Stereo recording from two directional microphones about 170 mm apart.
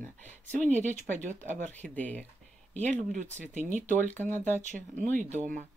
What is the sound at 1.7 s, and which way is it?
Speech, 10° left (ahead or behind).